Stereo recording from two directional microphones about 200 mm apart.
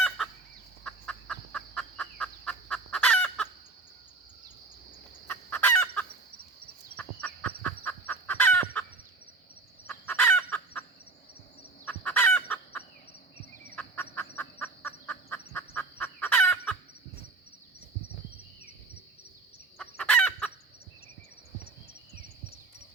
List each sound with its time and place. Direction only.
0.9 s fowl: 5° left (ahead or behind)
5.3 s chicken: 5° left (ahead or behind)
11.9 s chicken: 10° left (ahead or behind)
14.3 s a sound: 10° left (ahead or behind)
19.8 s chicken: 5° left (ahead or behind)